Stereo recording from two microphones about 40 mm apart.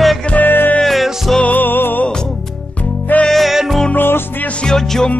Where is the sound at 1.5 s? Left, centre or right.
Left.